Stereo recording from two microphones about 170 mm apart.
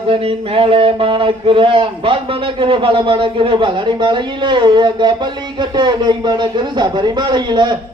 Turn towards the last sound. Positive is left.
turn(degrees=-25)  # may be behind; listen again after turning